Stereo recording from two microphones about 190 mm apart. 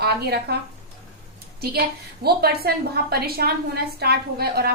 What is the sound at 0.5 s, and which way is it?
Speech, 60° right (ahead or behind).